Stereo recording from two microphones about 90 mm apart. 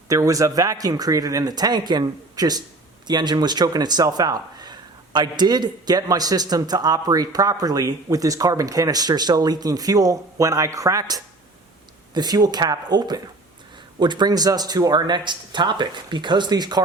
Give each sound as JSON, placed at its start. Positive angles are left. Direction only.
{"t": 0.1, "sound": "speech", "side_deg": -40}